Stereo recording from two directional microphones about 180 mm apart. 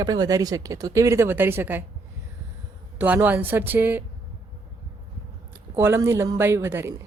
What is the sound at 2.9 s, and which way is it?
A woman's voice, 10° right (ahead or behind).